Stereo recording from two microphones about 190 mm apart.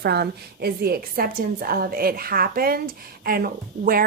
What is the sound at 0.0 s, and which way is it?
Speech, 60° right (ahead or behind).